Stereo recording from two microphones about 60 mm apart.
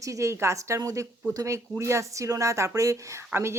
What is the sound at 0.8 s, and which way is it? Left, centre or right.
Speech, right.